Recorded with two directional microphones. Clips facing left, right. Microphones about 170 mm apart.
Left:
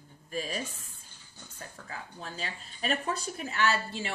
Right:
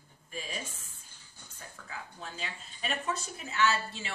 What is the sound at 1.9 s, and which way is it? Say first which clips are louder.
A woman's voice: left 1 dB; 40° left (ahead or behind).